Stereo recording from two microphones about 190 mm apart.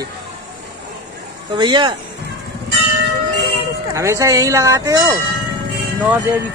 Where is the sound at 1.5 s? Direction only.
25° right (ahead or behind).